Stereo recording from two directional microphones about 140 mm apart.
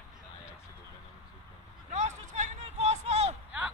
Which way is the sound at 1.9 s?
55° right (ahead or behind).